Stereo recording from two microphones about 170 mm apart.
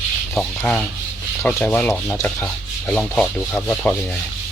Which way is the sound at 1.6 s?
5° left (ahead or behind).